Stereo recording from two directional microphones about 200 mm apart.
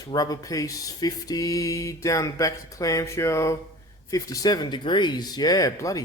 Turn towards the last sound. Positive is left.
turn(degrees=15)  # may be behind; listen again after turning